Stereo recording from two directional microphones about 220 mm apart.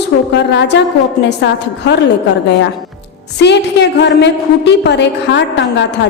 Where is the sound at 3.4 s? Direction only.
50° left (ahead or behind).